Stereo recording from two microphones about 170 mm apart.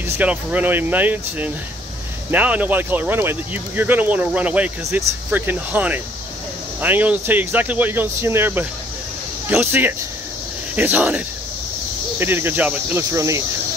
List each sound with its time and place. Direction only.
0.2 s speech: 10° right (ahead or behind)